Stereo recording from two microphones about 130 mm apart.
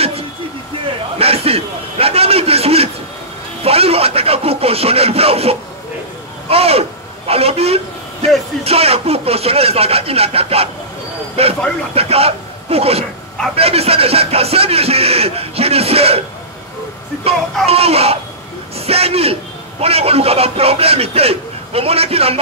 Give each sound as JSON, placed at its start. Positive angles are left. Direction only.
{"t": 1.1, "sound": "a man's voice", "side_deg": -50}
{"t": 17.6, "sound": "speech", "side_deg": -50}